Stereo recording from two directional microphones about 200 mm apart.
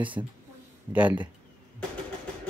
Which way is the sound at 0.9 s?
10° right (ahead or behind).